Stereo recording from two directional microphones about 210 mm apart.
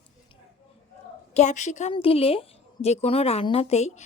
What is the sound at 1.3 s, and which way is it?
A woman's voice, 35° left (ahead or behind).